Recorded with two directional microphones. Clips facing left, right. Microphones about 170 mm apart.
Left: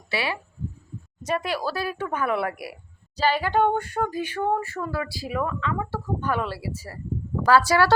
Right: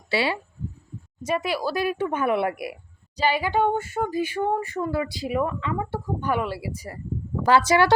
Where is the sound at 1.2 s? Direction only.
10° right (ahead or behind).